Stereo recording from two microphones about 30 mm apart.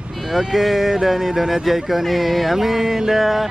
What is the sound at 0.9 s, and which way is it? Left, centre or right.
Speech, centre.